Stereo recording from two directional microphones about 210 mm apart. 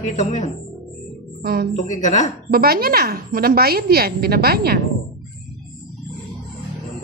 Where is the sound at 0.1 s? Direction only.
35° left (ahead or behind).